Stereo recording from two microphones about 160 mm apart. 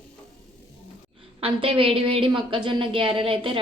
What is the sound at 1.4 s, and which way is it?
A woman's voice, 35° right (ahead or behind).